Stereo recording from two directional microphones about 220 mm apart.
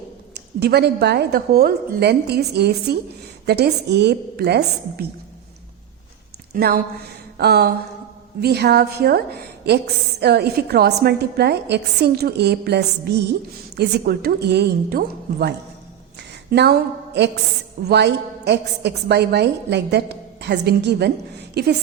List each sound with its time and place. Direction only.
0.3 s a woman's voice: 45° right (ahead or behind)
6.5 s a woman's voice: 45° right (ahead or behind)
17.8 s a woman's voice: 50° right (ahead or behind)